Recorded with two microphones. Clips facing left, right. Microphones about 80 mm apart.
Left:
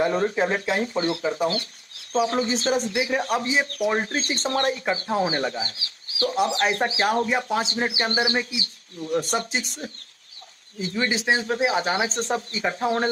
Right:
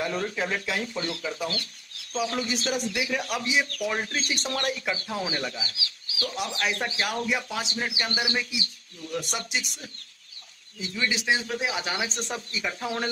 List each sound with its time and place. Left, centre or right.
0.0 s speech: left